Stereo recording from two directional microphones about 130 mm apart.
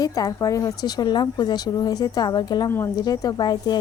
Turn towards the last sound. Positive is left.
turn(degrees=30)  # may be behind; listen again after turning